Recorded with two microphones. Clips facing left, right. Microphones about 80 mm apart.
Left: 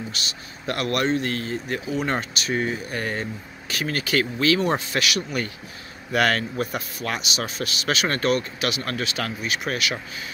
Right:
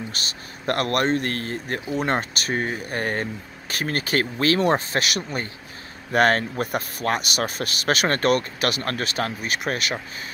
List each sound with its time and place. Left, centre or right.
0.1 s a man's voice: right